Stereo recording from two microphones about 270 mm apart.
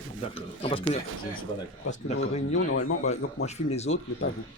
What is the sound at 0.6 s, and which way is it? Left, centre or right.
Speech, left.